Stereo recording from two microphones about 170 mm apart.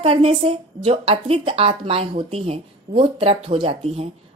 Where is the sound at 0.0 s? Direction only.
30° right (ahead or behind).